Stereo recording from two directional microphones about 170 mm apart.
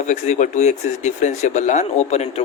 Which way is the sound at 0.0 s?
45° left (ahead or behind).